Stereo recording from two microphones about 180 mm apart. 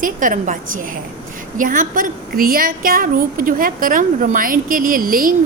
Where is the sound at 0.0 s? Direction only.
45° right (ahead or behind).